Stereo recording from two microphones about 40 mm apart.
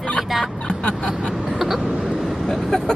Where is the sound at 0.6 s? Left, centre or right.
Left.